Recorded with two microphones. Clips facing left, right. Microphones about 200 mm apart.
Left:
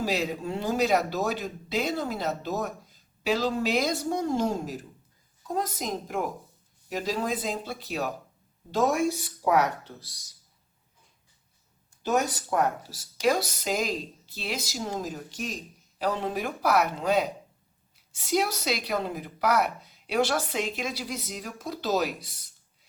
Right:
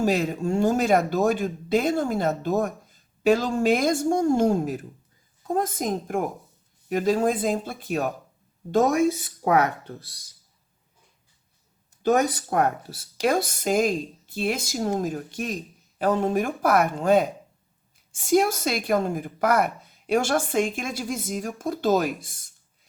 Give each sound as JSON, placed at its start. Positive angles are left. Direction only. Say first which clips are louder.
{"t": 0.0, "sound": "speech", "louder": "right 5 dB", "side_deg": -50}
{"t": 12.0, "sound": "speech", "louder": "right 5 dB", "side_deg": -55}